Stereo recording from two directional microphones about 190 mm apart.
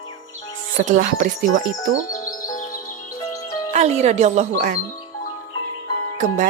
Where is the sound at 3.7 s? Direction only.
35° right (ahead or behind).